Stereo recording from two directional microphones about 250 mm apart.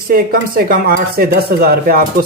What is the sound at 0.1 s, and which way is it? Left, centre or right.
Speech, right.